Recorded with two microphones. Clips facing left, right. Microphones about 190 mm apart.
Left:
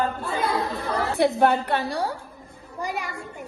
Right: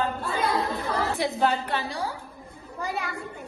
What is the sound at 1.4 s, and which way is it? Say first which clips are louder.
Speech: left 4 dB; 60° left (ahead or behind).